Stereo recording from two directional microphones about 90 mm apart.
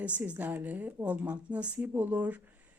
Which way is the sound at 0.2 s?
20° right (ahead or behind).